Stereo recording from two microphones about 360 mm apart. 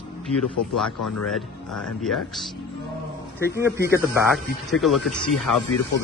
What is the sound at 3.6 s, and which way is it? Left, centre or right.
Speech, centre.